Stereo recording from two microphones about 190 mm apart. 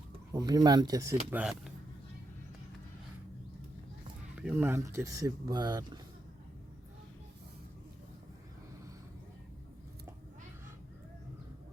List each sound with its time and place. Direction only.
0.3 s speech: 20° right (ahead or behind); by 1.7 s 5° right (ahead or behind)
4.4 s speech: 10° right (ahead or behind)